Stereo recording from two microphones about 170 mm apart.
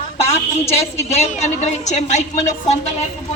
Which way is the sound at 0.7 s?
40° left (ahead or behind).